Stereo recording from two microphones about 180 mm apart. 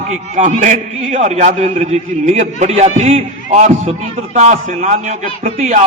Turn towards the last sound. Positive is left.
turn(degrees=-40)  # may be behind; listen again after turning